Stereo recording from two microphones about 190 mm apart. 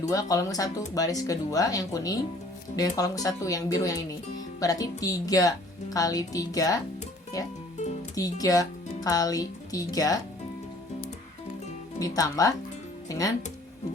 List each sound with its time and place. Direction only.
0.1 s speech: 20° left (ahead or behind)
8.1 s speech: 20° left (ahead or behind)
11.9 s speech: 20° left (ahead or behind)